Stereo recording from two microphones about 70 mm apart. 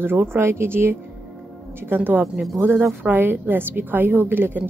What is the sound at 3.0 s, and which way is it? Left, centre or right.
A woman's voice, right.